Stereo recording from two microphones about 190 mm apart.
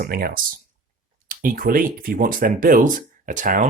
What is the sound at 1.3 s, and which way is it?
Speech, 45° right (ahead or behind).